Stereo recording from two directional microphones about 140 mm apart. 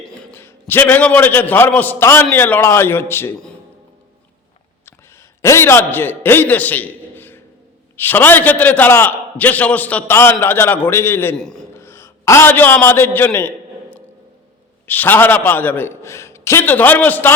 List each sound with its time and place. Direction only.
0.0 s a sound: 5° left (ahead or behind)
0.7 s a man's voice: 15° left (ahead or behind)
5.4 s a man's voice: 20° left (ahead or behind)
11.3 s a man's voice: 5° left (ahead or behind)
11.7 s a man's voice: 15° left (ahead or behind)
14.8 s a man's voice: 15° left (ahead or behind)